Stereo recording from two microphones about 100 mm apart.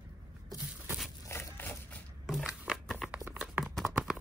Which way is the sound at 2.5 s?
5° right (ahead or behind).